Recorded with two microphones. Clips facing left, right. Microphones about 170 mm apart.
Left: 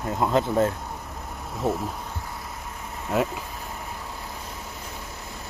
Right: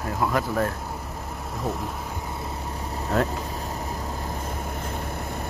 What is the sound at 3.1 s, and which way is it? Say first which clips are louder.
Speech: even; 5° left (ahead or behind).